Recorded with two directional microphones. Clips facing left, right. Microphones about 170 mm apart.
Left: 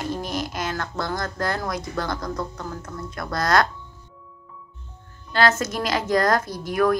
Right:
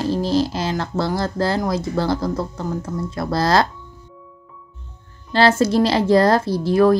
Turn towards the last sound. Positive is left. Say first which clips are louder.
# right 7 dB
turn(degrees=-30)  # may be behind; listen again after turning